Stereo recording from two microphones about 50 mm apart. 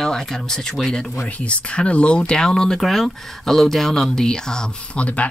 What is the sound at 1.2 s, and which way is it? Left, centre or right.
Speech, left.